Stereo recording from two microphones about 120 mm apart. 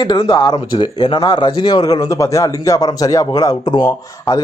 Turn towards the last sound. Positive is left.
turn(degrees=30)  # may be behind; listen again after turning